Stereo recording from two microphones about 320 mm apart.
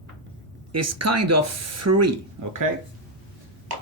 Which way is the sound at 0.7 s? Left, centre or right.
Right.